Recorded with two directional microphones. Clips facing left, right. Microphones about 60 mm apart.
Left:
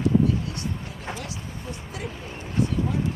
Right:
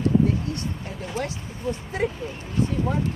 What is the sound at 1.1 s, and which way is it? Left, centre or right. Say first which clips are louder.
Speech: right 5 dB; right.